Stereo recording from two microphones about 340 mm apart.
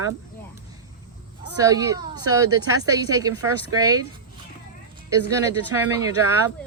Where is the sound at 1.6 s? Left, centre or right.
Centre.